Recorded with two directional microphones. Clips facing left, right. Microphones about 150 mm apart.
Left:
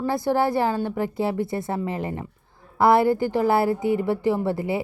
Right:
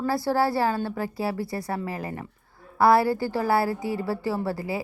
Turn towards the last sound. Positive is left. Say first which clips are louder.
# left 4 dB
turn(degrees=25)  # may be behind; listen again after turning